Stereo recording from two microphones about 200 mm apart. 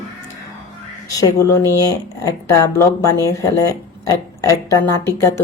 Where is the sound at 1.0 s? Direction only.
15° left (ahead or behind).